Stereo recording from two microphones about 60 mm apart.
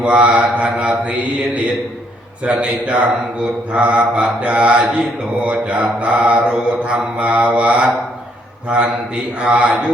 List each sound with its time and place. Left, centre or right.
0.0 s mantra: right
2.4 s mantra: right
9.4 s mantra: centre